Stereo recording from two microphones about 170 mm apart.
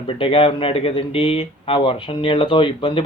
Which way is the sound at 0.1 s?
35° left (ahead or behind).